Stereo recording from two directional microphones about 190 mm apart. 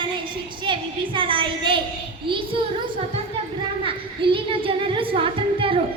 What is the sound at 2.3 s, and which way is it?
Speech, 25° right (ahead or behind).